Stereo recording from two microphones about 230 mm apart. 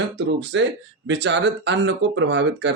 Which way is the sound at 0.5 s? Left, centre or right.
Right.